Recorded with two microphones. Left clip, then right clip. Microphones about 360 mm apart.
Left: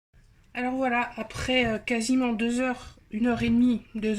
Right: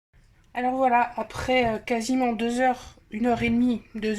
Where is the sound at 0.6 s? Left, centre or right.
Right.